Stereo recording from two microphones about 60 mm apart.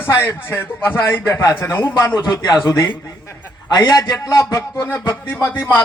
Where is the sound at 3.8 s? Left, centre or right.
Left.